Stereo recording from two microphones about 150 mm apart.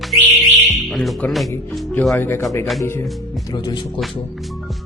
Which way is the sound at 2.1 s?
15° left (ahead or behind).